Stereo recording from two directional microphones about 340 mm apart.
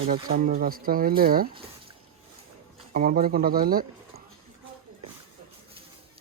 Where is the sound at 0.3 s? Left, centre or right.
Right.